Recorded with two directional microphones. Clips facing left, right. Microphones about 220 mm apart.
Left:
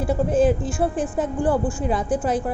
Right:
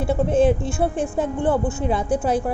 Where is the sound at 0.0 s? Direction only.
25° right (ahead or behind).